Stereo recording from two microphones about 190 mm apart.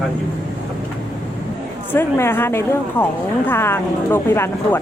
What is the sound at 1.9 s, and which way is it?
Speech, 10° left (ahead or behind).